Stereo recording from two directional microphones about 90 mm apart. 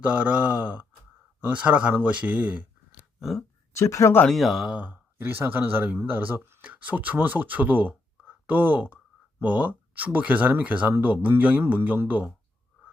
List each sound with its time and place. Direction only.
0.0 s a man's voice: 15° right (ahead or behind)
3.2 s speech: centre (ahead or behind)
3.8 s speech: 35° left (ahead or behind)
4.3 s speech: centre (ahead or behind)
4.8 s speech: 20° right (ahead or behind)